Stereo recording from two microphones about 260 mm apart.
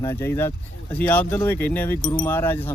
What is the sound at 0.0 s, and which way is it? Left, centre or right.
Speech, centre.